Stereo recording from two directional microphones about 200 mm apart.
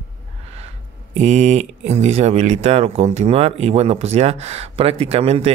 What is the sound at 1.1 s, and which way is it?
Speech, 35° right (ahead or behind).